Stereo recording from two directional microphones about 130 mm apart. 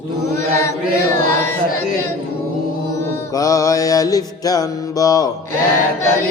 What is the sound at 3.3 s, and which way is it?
Music, 25° left (ahead or behind).